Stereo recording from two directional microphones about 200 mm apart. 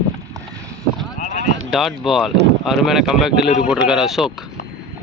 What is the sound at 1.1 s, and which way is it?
Clip-clop, 35° left (ahead or behind).